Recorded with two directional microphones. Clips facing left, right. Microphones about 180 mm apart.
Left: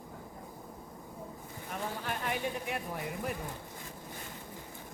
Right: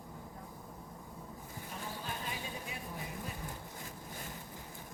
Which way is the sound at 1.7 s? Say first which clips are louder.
Left 7 dB; 70° left (ahead or behind).